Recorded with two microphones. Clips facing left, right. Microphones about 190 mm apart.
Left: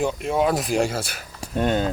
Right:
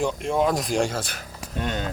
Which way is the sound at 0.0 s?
5° left (ahead or behind).